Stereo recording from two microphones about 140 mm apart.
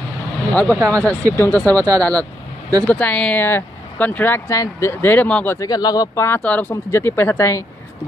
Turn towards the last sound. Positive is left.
turn(degrees=20)  # may be behind; listen again after turning